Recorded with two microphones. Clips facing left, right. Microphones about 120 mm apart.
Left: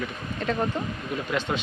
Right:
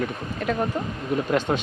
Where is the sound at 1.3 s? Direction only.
45° right (ahead or behind).